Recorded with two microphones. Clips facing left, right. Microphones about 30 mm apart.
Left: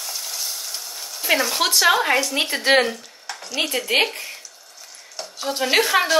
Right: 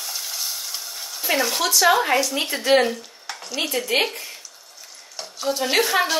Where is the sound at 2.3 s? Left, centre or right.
Left.